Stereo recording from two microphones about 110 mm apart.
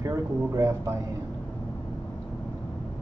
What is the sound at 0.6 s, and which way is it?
Speech, 25° right (ahead or behind).